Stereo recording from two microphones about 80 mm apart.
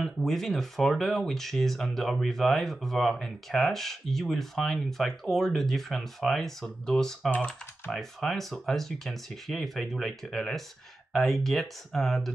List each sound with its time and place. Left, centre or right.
0.0 s speech: centre
7.2 s speech: centre
7.9 s speech: centre